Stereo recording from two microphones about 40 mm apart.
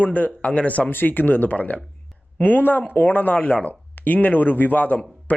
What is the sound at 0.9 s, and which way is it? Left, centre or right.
Speech, left.